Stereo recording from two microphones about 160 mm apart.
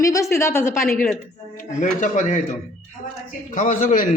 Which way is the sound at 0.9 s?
5° left (ahead or behind).